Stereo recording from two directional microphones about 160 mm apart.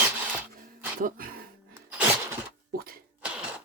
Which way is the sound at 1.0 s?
60° right (ahead or behind).